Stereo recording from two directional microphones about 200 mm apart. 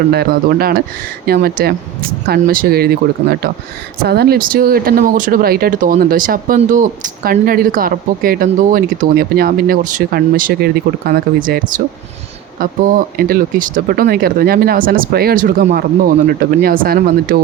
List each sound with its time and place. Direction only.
0.1 s speech: 50° right (ahead or behind)
13.1 s speech: 45° right (ahead or behind)